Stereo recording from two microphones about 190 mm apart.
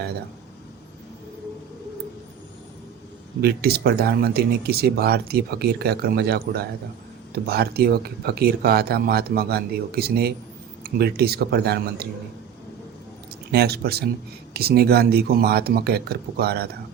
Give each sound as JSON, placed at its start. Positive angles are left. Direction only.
{"t": 3.4, "sound": "speech", "side_deg": -55}
{"t": 13.5, "sound": "speech", "side_deg": -55}